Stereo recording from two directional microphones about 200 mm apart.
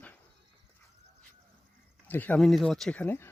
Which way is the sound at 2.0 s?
10° left (ahead or behind).